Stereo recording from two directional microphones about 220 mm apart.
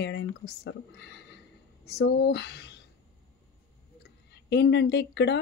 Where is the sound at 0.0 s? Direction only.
55° left (ahead or behind).